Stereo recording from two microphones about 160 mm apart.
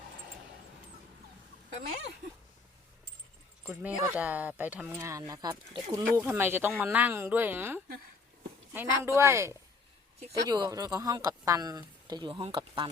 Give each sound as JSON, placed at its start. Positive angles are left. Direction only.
{"t": 3.6, "sound": "speech", "side_deg": -10}